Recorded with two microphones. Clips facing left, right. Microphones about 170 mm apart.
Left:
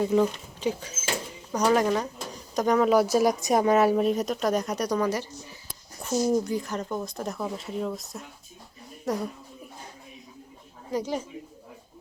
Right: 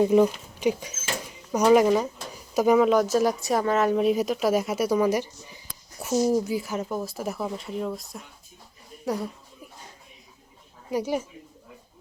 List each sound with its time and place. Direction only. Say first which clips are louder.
0.0 s speech: right 4 dB; 20° right (ahead or behind)
2.9 s speech: even; 10° left (ahead or behind)
10.9 s speech: right 2 dB; 10° right (ahead or behind)